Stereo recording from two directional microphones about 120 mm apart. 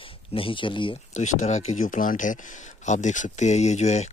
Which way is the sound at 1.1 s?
80° left.